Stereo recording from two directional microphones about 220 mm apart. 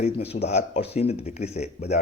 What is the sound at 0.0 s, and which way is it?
Speech, 30° left (ahead or behind).